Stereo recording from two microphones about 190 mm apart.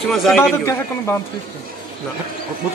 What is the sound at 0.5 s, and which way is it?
Speech, 15° left (ahead or behind).